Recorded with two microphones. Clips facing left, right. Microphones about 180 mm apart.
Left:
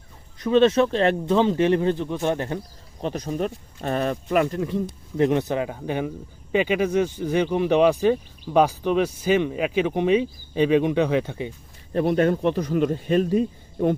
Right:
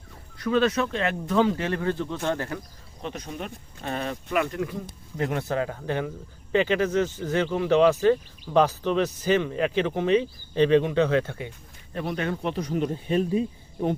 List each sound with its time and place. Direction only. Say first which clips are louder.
0.3 s speech: left 6 dB; 20° left (ahead or behind)
2.6 s speech: left 6 dB; 35° left (ahead or behind)
4.5 s speech: left 5 dB; 25° left (ahead or behind)
11.9 s speech: left 9 dB; 45° left (ahead or behind)
12.7 s speech: left 2 dB; 90° left